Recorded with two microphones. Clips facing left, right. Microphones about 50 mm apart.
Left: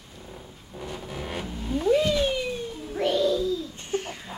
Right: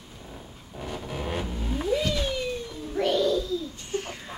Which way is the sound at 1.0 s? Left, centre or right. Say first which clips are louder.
Right 3 dB; centre.